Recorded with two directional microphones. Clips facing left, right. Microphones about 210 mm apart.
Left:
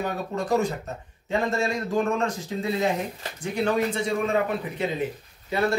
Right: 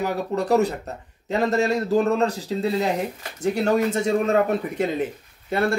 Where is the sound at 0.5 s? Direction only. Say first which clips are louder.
Right 4 dB; 35° right (ahead or behind).